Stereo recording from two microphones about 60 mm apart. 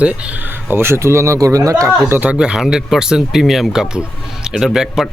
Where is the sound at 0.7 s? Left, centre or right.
Right.